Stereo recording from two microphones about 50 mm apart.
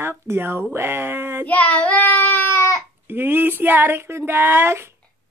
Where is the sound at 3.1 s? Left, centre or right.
Right.